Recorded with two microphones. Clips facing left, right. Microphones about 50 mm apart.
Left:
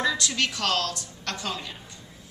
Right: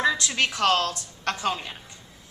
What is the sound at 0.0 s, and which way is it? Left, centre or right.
A woman's voice, right.